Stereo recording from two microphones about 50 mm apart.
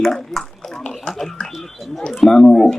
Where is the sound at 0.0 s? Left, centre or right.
Centre.